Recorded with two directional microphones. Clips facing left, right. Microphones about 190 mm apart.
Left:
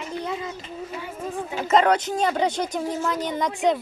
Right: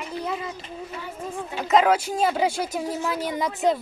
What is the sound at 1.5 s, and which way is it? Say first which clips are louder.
Speech: even; centre (ahead or behind).